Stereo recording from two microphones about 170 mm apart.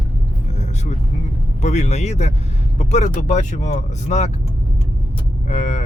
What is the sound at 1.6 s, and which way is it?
Speech, 40° left (ahead or behind).